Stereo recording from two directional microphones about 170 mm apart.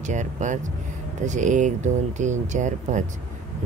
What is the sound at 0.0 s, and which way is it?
Speech, 45° right (ahead or behind).